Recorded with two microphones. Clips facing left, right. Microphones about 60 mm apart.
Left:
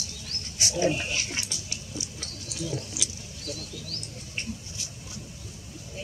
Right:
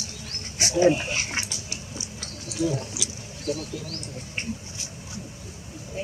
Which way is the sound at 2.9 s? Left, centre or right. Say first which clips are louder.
Right 2 dB; centre.